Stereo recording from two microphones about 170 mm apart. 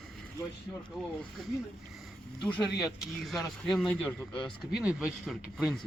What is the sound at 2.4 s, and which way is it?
Speech, 5° left (ahead or behind).